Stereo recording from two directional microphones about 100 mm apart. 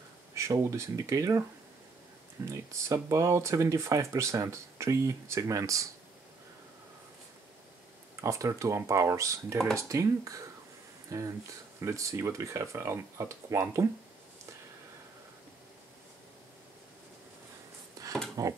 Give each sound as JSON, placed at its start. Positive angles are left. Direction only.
{"t": 0.3, "sound": "speech", "side_deg": -30}
{"t": 2.4, "sound": "speech", "side_deg": -30}
{"t": 8.2, "sound": "speech", "side_deg": -30}
{"t": 18.0, "sound": "a sound", "side_deg": -35}